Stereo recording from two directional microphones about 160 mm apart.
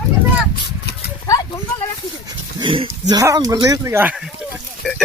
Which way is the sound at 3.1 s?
20° right (ahead or behind).